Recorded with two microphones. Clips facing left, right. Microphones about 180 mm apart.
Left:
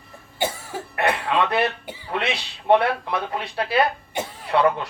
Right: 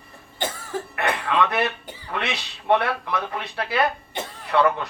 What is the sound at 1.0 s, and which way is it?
Music, 25° left (ahead or behind).